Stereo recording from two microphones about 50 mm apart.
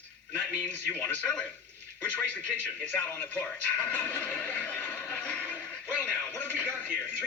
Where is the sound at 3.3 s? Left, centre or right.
Left.